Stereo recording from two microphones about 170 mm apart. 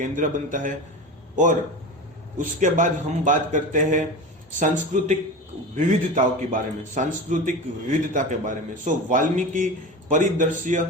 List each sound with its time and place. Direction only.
0.0 s a man's voice: 50° right (ahead or behind)
2.4 s a man's voice: 50° right (ahead or behind)